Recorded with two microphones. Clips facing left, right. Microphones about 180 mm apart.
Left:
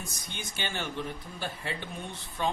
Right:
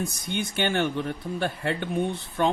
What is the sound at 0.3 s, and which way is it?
Speech, 60° right (ahead or behind).